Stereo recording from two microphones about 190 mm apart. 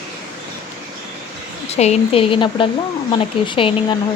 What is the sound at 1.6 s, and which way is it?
Speech, 35° left (ahead or behind).